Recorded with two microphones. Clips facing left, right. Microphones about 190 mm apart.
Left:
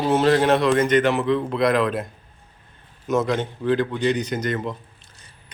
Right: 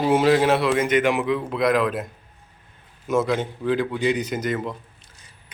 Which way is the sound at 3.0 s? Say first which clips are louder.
Even; 5° right (ahead or behind).